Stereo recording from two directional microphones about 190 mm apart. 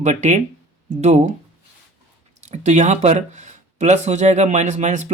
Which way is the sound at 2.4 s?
40° right (ahead or behind).